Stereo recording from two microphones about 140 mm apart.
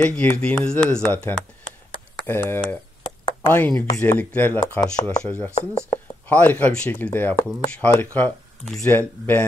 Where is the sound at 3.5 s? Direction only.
10° left (ahead or behind).